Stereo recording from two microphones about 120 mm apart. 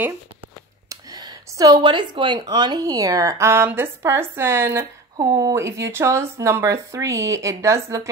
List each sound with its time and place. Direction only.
0.8 s speech: 35° right (ahead or behind)
5.1 s speech: 30° right (ahead or behind)